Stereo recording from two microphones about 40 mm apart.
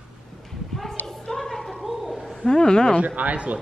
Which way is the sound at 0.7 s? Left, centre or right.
Centre.